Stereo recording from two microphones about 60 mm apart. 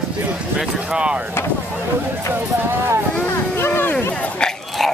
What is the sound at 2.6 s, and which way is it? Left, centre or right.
Speech, right.